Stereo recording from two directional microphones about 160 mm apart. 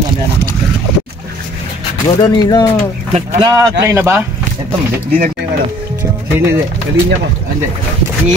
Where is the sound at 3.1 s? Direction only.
30° right (ahead or behind).